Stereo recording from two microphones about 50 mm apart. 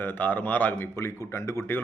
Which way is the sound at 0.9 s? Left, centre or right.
Left.